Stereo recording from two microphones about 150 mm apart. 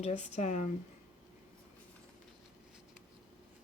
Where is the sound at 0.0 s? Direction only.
45° left (ahead or behind).